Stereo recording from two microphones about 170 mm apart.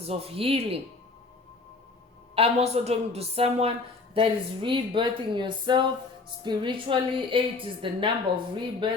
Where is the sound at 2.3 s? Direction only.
35° right (ahead or behind).